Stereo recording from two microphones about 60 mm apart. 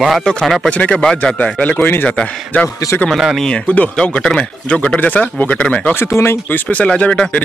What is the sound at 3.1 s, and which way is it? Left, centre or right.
Speech, centre.